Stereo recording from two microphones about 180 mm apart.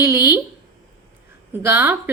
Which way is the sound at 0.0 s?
15° right (ahead or behind).